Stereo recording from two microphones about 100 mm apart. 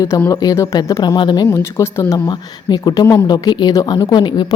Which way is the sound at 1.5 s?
25° left (ahead or behind).